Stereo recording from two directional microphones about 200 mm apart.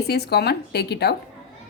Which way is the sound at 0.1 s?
55° left (ahead or behind).